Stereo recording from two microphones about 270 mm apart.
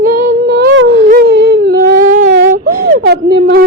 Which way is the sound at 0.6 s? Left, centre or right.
Right.